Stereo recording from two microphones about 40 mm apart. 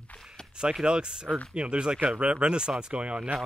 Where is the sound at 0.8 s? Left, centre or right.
Right.